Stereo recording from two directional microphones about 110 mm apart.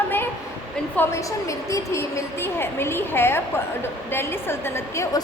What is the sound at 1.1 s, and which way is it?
A woman's voice, 25° left (ahead or behind).